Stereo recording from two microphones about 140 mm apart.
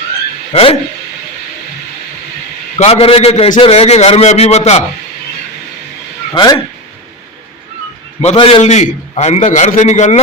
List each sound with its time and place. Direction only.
0.5 s a man's voice: 45° left (ahead or behind)
2.7 s a man's voice: 50° left (ahead or behind)
6.3 s speech: 30° left (ahead or behind)
8.4 s speech: 40° left (ahead or behind)
8.6 s a man's voice: 55° left (ahead or behind)